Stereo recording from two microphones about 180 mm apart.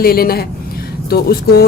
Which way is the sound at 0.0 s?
55° left (ahead or behind).